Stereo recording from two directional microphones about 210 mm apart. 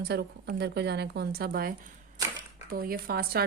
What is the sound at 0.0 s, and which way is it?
Speech, 50° right (ahead or behind).